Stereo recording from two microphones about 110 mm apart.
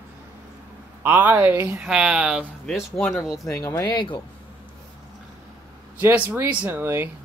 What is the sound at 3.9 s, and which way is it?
Speech, 45° left (ahead or behind).